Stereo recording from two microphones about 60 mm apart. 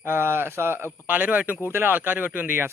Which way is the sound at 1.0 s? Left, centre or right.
Right.